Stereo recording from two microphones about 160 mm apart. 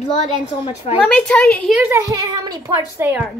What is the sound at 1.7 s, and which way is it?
A child's voice, 15° right (ahead or behind).